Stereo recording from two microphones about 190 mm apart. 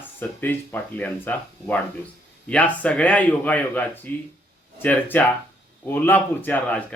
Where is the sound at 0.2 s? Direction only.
10° left (ahead or behind).